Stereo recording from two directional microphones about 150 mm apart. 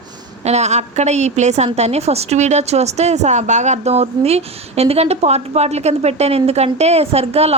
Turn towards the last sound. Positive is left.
turn(degrees=-45)  # may be behind; listen again after turning